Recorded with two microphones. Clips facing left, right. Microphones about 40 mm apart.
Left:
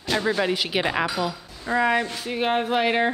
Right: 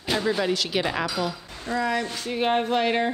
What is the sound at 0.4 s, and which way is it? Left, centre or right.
Speech, centre.